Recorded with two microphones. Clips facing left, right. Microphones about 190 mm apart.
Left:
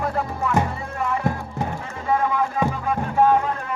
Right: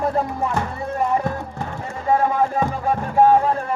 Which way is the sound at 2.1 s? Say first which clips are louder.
Right 3 dB; 40° right (ahead or behind).